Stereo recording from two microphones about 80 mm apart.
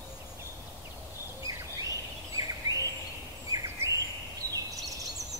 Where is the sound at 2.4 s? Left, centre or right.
Right.